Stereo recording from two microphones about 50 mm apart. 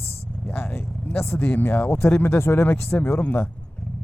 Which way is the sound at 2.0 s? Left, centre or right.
Left.